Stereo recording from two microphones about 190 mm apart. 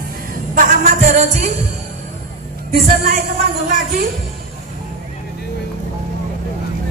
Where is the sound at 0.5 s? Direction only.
40° right (ahead or behind).